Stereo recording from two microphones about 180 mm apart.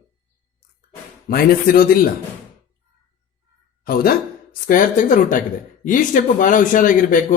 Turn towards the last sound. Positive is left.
turn(degrees=50)  # may be behind; listen again after turning